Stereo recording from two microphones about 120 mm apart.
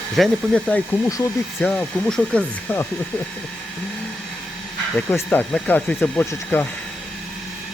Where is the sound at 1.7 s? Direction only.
5° left (ahead or behind).